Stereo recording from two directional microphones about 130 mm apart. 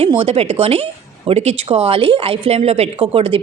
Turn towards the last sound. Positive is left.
turn(degrees=-45)  # may be behind; listen again after turning